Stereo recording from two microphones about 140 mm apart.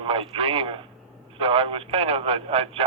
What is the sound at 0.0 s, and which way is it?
A man's voice, 40° right (ahead or behind).